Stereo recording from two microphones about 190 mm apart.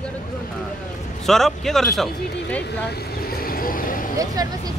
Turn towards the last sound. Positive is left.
turn(degrees=-20)  # may be behind; listen again after turning